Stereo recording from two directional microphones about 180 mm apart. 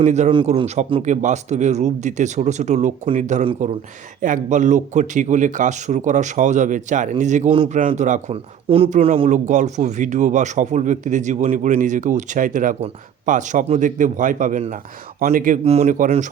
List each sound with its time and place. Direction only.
0.0 s speech: 40° right (ahead or behind)
0.3 s a man's voice: 30° right (ahead or behind); by 15.5 s 50° right (ahead or behind)
15.6 s speech: 35° right (ahead or behind)